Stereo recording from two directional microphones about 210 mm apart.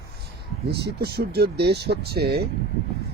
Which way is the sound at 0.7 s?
50° right (ahead or behind).